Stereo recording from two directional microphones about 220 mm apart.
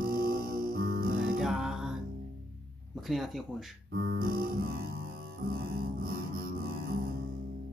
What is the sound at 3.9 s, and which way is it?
Music, 40° right (ahead or behind).